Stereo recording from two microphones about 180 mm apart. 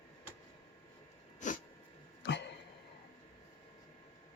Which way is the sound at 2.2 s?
80° left.